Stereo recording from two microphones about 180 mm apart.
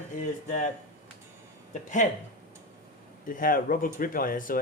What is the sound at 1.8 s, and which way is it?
Speech, 45° left (ahead or behind).